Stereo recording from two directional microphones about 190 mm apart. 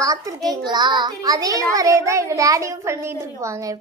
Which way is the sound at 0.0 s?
15° right (ahead or behind).